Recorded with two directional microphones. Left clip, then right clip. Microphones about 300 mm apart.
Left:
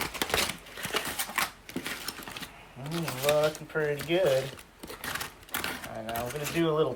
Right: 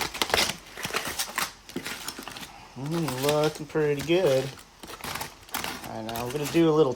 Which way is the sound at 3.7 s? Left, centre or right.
Centre.